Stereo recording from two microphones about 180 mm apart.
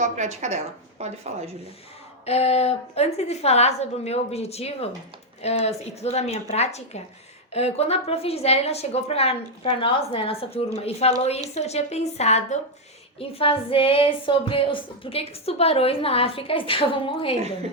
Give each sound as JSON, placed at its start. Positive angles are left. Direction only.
{"t": 0.0, "sound": "a woman's voice", "side_deg": -40}
{"t": 2.2, "sound": "speech", "side_deg": 35}